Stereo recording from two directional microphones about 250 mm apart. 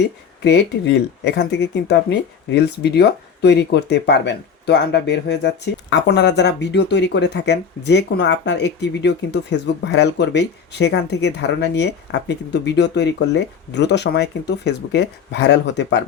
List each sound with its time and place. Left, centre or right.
0.4 s speech: left